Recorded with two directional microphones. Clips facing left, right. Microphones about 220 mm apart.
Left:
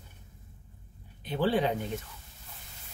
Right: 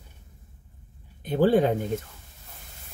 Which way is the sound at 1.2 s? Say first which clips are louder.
Right 7 dB; 50° right (ahead or behind).